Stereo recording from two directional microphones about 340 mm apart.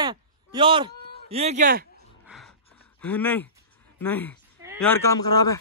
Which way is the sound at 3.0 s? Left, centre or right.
Centre.